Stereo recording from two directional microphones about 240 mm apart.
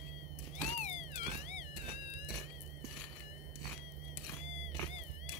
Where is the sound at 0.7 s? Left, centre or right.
Left.